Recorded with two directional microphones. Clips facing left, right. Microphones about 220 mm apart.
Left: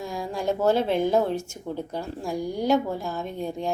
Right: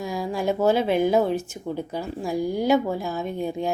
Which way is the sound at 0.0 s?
5° right (ahead or behind).